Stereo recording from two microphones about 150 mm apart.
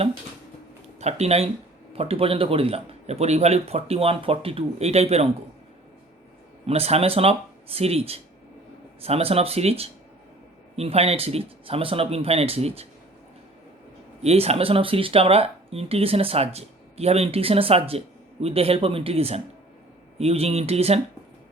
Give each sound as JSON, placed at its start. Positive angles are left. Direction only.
{"t": 0.9, "sound": "speech", "side_deg": -45}
{"t": 6.7, "sound": "speech", "side_deg": -45}
{"t": 14.2, "sound": "speech", "side_deg": -45}